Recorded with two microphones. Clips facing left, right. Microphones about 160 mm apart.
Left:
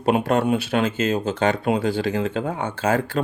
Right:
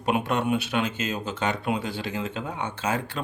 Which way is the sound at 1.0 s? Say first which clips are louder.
Left 8 dB; 55° left (ahead or behind).